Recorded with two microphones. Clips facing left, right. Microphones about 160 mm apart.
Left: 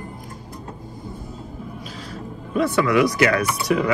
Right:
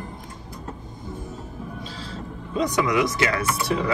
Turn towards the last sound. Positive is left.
turn(degrees=-30)  # may be behind; listen again after turning